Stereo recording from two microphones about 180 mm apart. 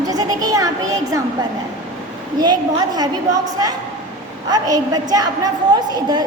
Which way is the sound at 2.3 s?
25° right (ahead or behind).